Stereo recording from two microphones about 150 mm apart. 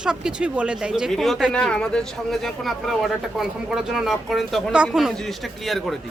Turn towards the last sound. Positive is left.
turn(degrees=0)  # may be behind; listen again after turning